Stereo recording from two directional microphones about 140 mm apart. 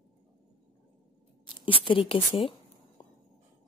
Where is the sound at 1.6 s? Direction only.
35° left (ahead or behind).